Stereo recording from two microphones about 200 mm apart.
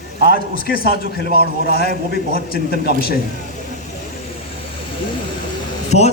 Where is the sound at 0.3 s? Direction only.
50° left (ahead or behind).